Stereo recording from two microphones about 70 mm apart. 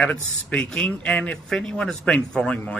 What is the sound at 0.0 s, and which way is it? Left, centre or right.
Speech, centre.